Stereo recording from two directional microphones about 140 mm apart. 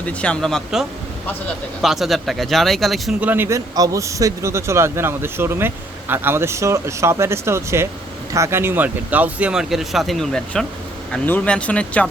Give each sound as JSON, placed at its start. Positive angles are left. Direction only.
{"t": 0.0, "sound": "speech", "side_deg": 10}
{"t": 3.2, "sound": "a man's voice", "side_deg": -15}